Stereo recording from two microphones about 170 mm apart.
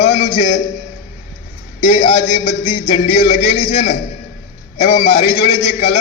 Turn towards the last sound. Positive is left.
turn(degrees=30)  # may be behind; listen again after turning